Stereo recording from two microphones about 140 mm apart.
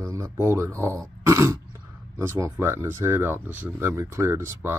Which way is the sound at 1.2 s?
20° right (ahead or behind).